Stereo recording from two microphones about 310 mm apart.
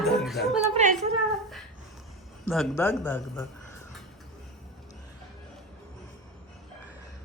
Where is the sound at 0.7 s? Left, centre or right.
Right.